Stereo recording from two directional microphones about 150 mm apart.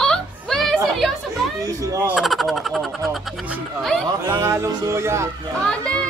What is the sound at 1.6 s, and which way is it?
Music, 20° right (ahead or behind).